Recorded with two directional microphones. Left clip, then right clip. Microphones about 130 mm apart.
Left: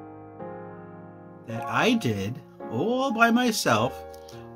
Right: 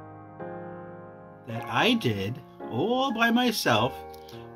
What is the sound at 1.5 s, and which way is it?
Speech, 55° left (ahead or behind).